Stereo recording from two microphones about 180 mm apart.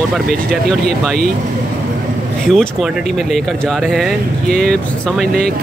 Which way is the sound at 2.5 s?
Centre (ahead or behind).